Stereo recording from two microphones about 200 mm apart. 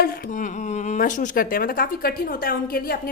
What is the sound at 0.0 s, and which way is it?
Speech, 50° left (ahead or behind).